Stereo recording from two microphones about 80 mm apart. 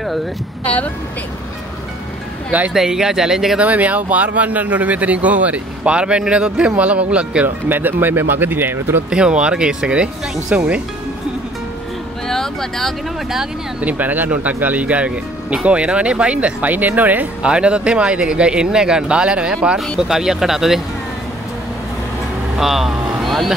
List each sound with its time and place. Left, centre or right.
2.7 s speech: centre
3.6 s speech: centre
7.4 s speech: right
9.1 s speech: centre
12.3 s speech: centre
13.7 s speech: centre
22.6 s vehicle: centre